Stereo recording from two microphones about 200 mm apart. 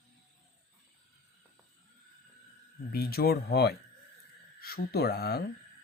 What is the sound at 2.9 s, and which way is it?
Speech, 50° left (ahead or behind).